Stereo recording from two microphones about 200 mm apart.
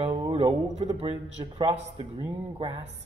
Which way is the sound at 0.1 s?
25° right (ahead or behind).